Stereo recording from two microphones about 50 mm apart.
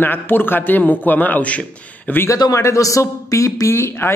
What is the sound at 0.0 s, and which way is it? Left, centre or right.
A man's voice, left.